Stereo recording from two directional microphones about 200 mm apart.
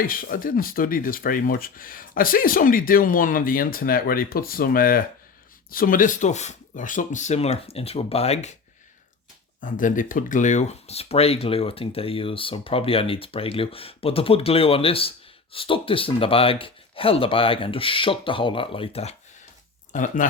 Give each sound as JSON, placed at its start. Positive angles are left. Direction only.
{"t": 0.0, "sound": "speech", "side_deg": 45}
{"t": 9.6, "sound": "speech", "side_deg": 40}
{"t": 19.9, "sound": "speech", "side_deg": 40}